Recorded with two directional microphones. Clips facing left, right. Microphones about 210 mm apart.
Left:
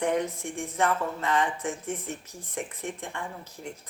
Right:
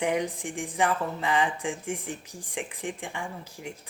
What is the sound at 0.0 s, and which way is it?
Speech, 15° right (ahead or behind).